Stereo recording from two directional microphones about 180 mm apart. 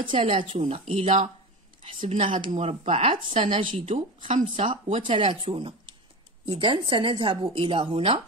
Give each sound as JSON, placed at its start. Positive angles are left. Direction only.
{"t": 0.1, "sound": "speech", "side_deg": -30}